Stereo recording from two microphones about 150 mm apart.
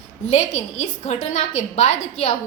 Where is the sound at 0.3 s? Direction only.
50° left (ahead or behind).